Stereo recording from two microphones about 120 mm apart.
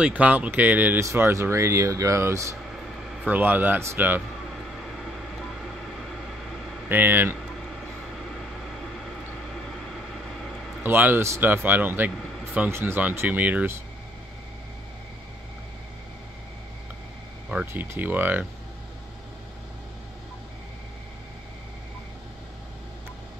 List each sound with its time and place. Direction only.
0.0 s a man's voice: 15° right (ahead or behind)
6.9 s a man's voice: 15° right (ahead or behind)
10.8 s a man's voice: 15° right (ahead or behind)
17.5 s a man's voice: 10° right (ahead or behind)